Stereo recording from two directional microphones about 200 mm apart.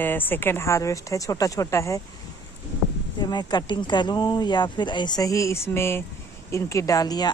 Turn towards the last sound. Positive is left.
turn(degrees=20)  # may be behind; listen again after turning